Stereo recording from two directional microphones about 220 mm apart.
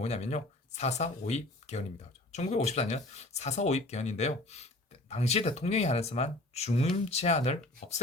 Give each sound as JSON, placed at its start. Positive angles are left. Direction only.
{"t": 0.0, "sound": "speech", "side_deg": 30}